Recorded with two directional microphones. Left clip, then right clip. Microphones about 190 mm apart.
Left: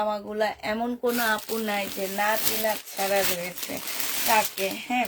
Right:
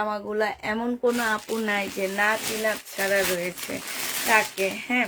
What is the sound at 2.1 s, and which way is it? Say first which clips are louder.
Speech: right 1 dB; 40° right (ahead or behind).